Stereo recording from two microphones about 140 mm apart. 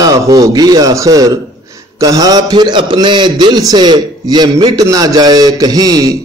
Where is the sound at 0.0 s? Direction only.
25° right (ahead or behind).